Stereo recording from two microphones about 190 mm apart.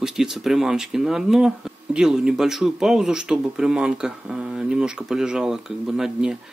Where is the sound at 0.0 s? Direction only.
Centre (ahead or behind).